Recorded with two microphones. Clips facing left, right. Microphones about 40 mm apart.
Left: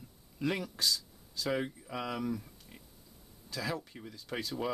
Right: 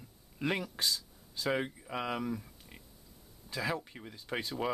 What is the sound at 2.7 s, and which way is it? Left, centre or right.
Pig, centre.